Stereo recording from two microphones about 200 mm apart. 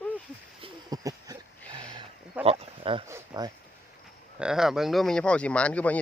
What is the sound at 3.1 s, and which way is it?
Speech, 15° right (ahead or behind).